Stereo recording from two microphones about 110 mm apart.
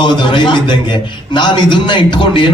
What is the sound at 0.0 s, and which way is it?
A man's voice, 45° left (ahead or behind).